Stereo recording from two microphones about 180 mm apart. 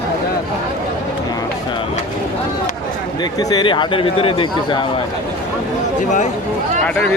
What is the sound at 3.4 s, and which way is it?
Speech, 25° left (ahead or behind).